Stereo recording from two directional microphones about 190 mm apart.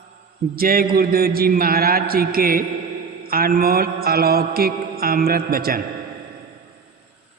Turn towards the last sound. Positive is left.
turn(degrees=-50)  # may be behind; listen again after turning